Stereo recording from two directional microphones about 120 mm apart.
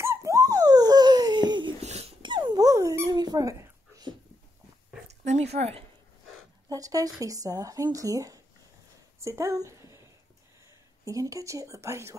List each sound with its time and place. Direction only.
0.0 s dog: 25° right (ahead or behind); by 1.8 s 40° right (ahead or behind)
1.8 s dog: 65° right (ahead or behind)
2.2 s dog: 40° right (ahead or behind)
5.0 s dog: 70° right (ahead or behind)
6.7 s speech: 30° right (ahead or behind)
11.1 s speech: 25° right (ahead or behind)